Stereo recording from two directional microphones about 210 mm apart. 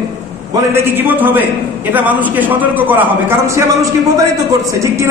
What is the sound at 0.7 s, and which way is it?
A man's voice, 10° right (ahead or behind).